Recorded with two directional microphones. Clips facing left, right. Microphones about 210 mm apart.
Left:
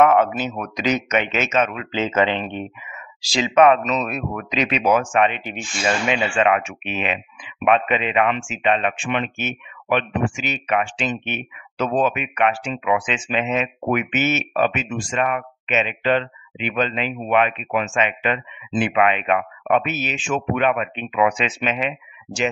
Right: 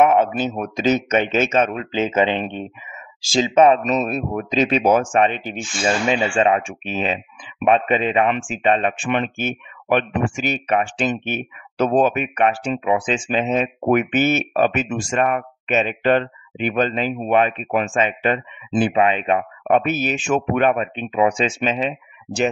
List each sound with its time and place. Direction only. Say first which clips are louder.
0.0 s a man's voice: even; 20° right (ahead or behind)
1.9 s speech: right 1 dB; 15° right (ahead or behind)
3.2 s speech: right 1 dB; 45° right (ahead or behind); by 4.6 s 30° right (ahead or behind)
4.6 s speech: right 4 dB; 45° right (ahead or behind)
4.8 s speech: left 2 dB; 30° right (ahead or behind)
19.8 s speech: right 5 dB; 45° right (ahead or behind)